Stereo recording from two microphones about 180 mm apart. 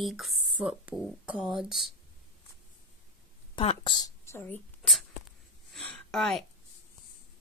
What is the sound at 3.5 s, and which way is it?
Speech, 30° left (ahead or behind).